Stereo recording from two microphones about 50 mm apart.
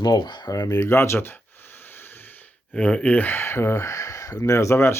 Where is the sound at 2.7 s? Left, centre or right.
Left.